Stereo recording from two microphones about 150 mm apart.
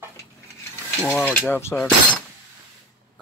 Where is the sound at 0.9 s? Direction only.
10° left (ahead or behind).